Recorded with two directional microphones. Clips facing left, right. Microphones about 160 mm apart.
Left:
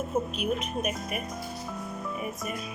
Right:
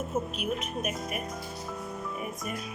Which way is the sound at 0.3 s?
Centre (ahead or behind).